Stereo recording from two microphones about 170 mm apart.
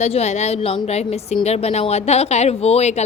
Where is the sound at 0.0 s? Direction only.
40° left (ahead or behind).